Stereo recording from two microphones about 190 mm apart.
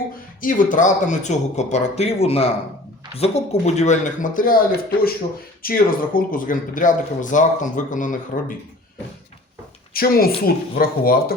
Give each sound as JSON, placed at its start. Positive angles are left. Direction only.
{"t": 0.4, "sound": "speech", "side_deg": 45}
{"t": 9.9, "sound": "speech", "side_deg": 50}